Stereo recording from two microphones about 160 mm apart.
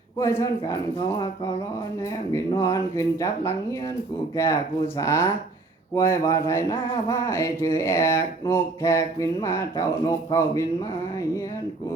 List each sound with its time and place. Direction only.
0.2 s speech: 20° left (ahead or behind)
4.9 s speech: 15° left (ahead or behind)